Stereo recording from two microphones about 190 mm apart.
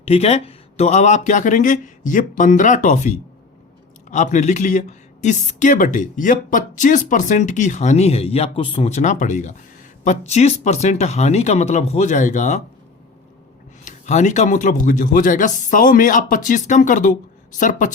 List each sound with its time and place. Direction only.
0.0 s speech: 35° left (ahead or behind)
13.8 s a woman's voice: 40° left (ahead or behind)